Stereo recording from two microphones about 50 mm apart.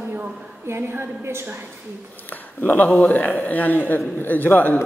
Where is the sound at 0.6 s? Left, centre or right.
Right.